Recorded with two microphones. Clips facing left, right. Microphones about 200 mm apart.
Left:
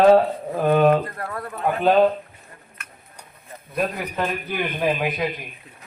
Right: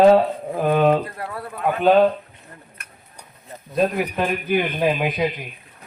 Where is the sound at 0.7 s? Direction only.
15° right (ahead or behind).